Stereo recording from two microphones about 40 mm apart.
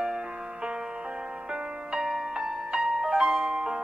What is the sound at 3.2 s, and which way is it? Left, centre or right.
Music, centre.